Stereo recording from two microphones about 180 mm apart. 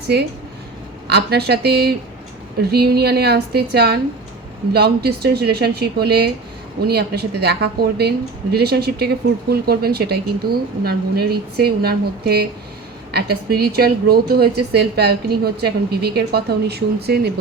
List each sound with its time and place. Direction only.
1.0 s speech: 65° right (ahead or behind)